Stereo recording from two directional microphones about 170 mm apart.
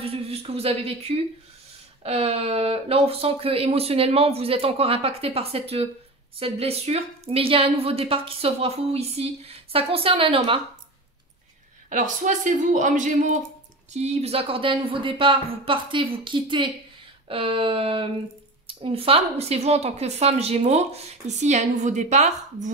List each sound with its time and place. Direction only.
0.0 s a woman's voice: 35° right (ahead or behind)
11.9 s a woman's voice: 50° right (ahead or behind)